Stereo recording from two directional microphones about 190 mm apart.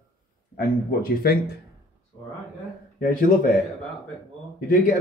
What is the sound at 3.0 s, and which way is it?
Speech, 45° left (ahead or behind).